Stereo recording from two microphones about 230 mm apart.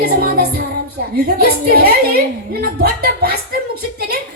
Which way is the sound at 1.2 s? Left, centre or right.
Right.